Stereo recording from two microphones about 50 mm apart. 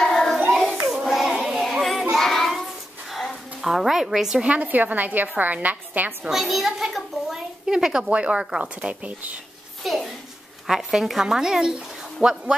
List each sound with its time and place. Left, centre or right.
0.0 s hands: centre
1.0 s child singing: centre
4.4 s a woman's voice: right
6.3 s a child's voice: centre
8.1 s speech: right
8.7 s a woman's voice: right
9.8 s a woman's voice: centre